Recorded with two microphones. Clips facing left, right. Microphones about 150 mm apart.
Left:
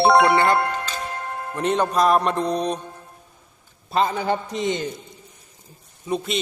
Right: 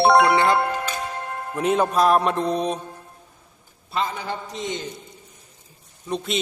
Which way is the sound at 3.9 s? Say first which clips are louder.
Left 6 dB; 45° left (ahead or behind).